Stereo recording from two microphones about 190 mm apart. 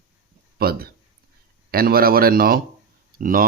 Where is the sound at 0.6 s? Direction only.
55° right (ahead or behind).